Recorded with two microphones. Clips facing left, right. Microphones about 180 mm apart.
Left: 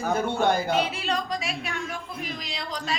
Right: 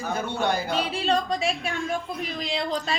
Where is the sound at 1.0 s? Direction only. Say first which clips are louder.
Right 5 dB; 30° right (ahead or behind).